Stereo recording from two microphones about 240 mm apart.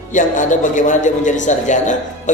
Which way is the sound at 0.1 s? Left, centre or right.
Left.